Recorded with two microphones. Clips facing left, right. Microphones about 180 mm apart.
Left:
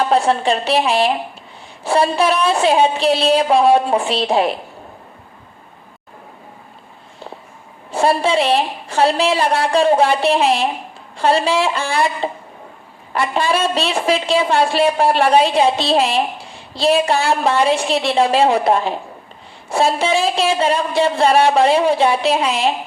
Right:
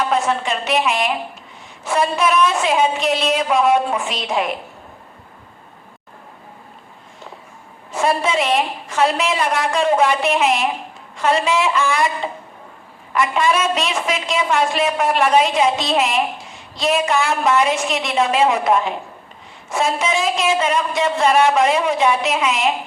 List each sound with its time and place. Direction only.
0.0 s a woman's voice: 30° left (ahead or behind)
7.9 s a woman's voice: 30° left (ahead or behind)